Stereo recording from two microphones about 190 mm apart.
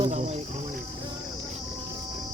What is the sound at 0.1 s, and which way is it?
Cricket, 35° right (ahead or behind).